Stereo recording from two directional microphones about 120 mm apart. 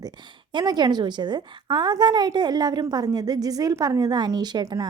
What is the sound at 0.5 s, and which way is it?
A woman's voice, 35° right (ahead or behind).